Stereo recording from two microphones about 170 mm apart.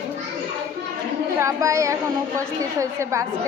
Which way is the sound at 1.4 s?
20° right (ahead or behind).